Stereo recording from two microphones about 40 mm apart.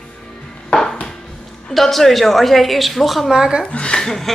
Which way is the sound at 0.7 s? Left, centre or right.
Centre.